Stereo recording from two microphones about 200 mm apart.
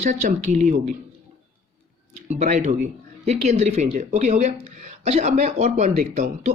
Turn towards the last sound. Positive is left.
turn(degrees=-35)  # may be behind; listen again after turning